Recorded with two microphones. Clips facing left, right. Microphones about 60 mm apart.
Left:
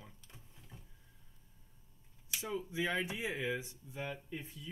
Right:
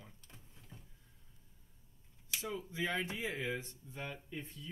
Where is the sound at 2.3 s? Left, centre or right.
Centre.